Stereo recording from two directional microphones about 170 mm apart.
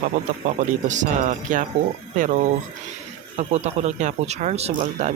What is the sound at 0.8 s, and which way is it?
Speech, 45° right (ahead or behind).